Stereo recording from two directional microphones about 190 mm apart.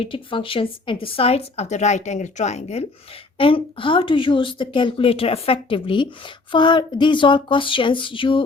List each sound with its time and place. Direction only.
0.0 s speech: 25° left (ahead or behind)